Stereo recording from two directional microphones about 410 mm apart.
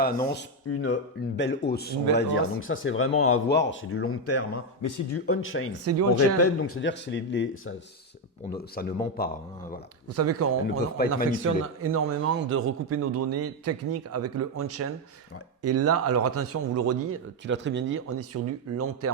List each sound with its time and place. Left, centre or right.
0.0 s a man's voice: left
0.7 s speech: left
1.4 s a man's voice: left
5.8 s a man's voice: right
6.1 s a man's voice: left
8.5 s a man's voice: left
10.2 s a man's voice: right
10.7 s a man's voice: left
11.3 s a man's voice: right